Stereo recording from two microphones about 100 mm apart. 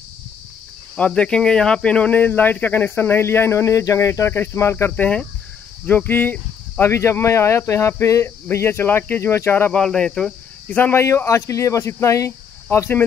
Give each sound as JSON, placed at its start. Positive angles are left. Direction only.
{"t": 0.9, "sound": "speech", "side_deg": 10}
{"t": 9.8, "sound": "speech", "side_deg": 5}
{"t": 10.8, "sound": "speech", "side_deg": 25}